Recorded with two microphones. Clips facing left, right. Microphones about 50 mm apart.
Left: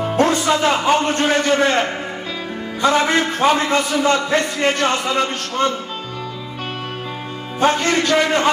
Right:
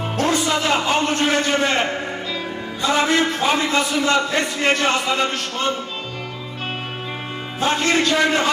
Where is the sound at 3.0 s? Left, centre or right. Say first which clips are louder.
Left 2 dB; left.